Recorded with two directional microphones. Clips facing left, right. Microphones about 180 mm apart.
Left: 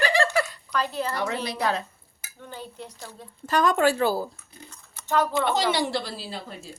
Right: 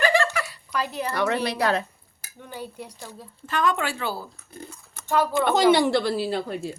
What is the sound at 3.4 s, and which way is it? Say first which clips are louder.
Speech: left 4 dB; 40° left (ahead or behind).